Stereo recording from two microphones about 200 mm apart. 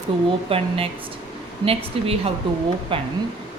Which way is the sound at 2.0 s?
30° right (ahead or behind).